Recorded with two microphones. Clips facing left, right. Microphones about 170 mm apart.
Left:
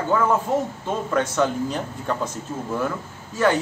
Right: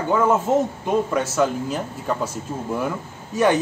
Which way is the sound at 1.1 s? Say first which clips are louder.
Right 1 dB; 5° right (ahead or behind).